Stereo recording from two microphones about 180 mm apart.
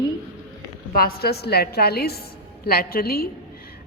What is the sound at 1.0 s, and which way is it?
A woman's voice, 60° left (ahead or behind).